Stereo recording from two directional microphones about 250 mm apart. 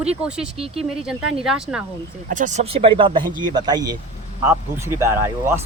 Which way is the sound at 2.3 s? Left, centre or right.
Right.